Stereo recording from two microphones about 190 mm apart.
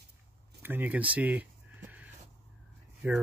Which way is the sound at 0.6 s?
10° right (ahead or behind).